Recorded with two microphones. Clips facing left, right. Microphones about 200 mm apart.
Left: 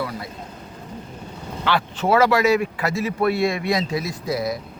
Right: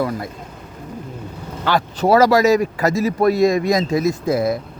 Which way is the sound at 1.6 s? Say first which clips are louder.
Right 4 dB; 40° right (ahead or behind).